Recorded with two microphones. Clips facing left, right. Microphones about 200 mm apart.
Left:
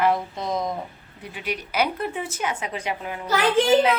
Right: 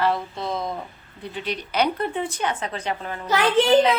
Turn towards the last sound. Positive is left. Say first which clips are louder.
# right 1 dB
turn(degrees=10)  # may be behind; listen again after turning